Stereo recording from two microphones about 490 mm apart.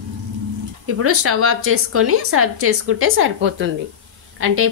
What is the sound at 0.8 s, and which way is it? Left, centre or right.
A woman's voice, right.